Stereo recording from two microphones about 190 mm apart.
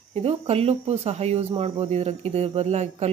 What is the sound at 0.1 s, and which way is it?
Speech, 30° right (ahead or behind).